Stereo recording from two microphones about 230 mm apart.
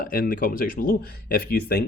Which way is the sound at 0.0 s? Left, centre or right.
Left.